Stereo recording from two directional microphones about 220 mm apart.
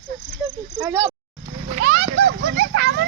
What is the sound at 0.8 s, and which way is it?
Speech, 10° right (ahead or behind).